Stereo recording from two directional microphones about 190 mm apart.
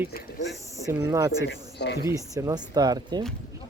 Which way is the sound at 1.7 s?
60° left (ahead or behind).